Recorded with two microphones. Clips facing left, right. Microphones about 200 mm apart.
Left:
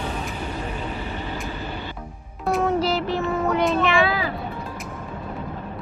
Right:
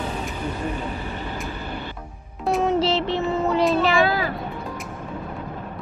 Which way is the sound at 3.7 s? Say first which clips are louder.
Right 1 dB; 35° right (ahead or behind).